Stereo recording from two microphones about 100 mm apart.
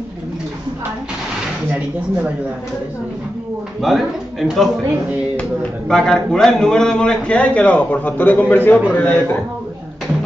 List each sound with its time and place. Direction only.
3.8 s a man's voice: centre (ahead or behind); by 9.4 s 20° left (ahead or behind)